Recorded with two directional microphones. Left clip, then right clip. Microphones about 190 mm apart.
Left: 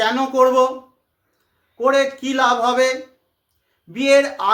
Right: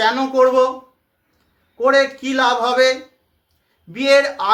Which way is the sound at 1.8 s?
15° left (ahead or behind).